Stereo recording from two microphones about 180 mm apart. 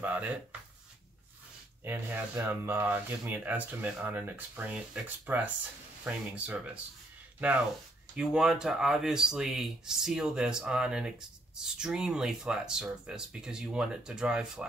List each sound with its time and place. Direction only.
0.0 s speech: 10° right (ahead or behind)
1.9 s speech: 10° right (ahead or behind)